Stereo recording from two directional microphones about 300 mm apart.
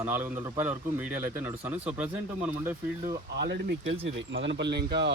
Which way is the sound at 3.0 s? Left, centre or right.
Right.